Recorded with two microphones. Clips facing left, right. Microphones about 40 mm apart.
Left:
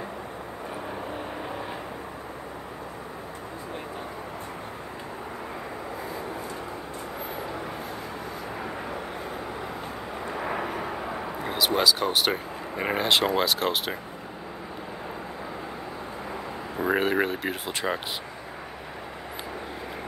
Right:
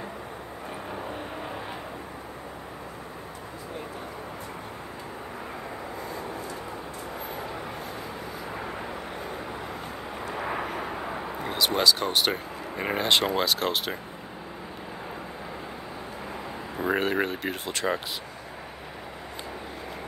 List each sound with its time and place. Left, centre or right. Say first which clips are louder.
10.3 s vehicle: left 1 dB; centre
11.4 s speech: even; centre
16.7 s a sound: left 2 dB; centre